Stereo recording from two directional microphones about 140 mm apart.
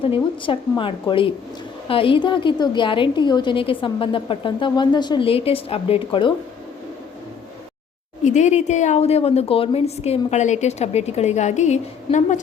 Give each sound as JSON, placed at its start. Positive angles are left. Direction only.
{"t": 0.0, "sound": "a woman's voice", "side_deg": 40}
{"t": 8.2, "sound": "speech", "side_deg": 55}